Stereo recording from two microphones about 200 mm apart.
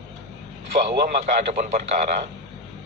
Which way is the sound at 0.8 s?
35° right (ahead or behind).